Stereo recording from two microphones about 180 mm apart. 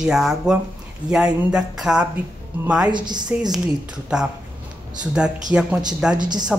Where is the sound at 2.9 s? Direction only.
25° right (ahead or behind).